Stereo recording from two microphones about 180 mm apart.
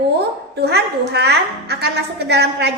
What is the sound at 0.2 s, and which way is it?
A child's voice, 65° right (ahead or behind).